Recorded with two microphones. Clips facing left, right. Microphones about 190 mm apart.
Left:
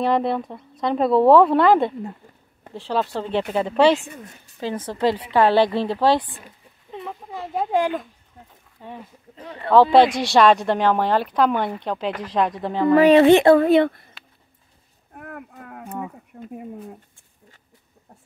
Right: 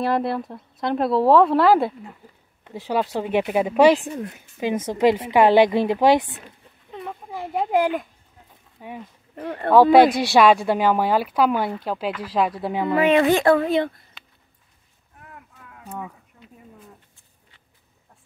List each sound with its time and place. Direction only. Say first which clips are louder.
0.0 s a woman's voice: left 2 dB; 5° right (ahead or behind)
6.9 s a sound: even; centre (ahead or behind)
7.3 s a woman's voice: right 1 dB; 15° right (ahead or behind)
9.3 s speech: right 7 dB; 55° right (ahead or behind)
10.3 s a woman's voice: left 2 dB; 10° right (ahead or behind)
12.9 s speech: left 6 dB; 35° left (ahead or behind)
13.6 s speech: left 5 dB; 65° left (ahead or behind)
14.2 s a sound: left 1 dB; centre (ahead or behind)
15.1 s cattle: left 10 dB; 60° left (ahead or behind)
16.3 s speech: left 13 dB; 60° left (ahead or behind)